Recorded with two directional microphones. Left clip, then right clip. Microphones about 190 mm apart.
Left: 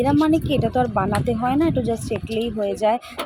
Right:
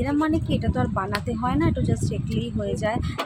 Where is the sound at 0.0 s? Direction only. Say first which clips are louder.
Left 5 dB; 20° left (ahead or behind).